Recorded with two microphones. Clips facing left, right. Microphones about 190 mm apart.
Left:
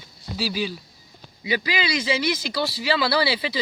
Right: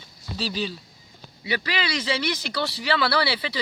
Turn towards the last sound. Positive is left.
turn(degrees=15)  # may be behind; listen again after turning